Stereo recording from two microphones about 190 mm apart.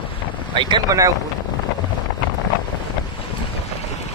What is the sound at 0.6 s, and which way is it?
Speech, 25° right (ahead or behind).